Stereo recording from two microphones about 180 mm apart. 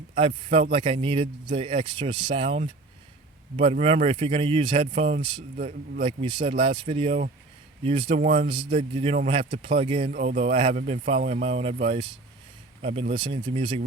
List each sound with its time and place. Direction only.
0.2 s speech: 30° right (ahead or behind)
5.5 s a man's voice: 55° right (ahead or behind)
6.0 s speech: 30° right (ahead or behind)
10.1 s speech: 40° right (ahead or behind)